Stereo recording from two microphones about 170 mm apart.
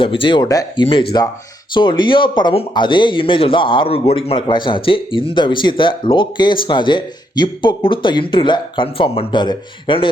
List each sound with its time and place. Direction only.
0.0 s speech: 30° left (ahead or behind)